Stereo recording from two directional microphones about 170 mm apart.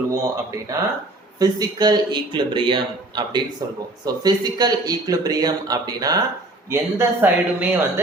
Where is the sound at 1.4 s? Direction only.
25° right (ahead or behind).